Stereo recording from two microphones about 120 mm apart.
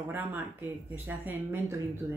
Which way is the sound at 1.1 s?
15° right (ahead or behind).